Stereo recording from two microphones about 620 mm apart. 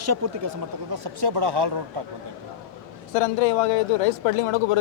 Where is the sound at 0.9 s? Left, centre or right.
Right.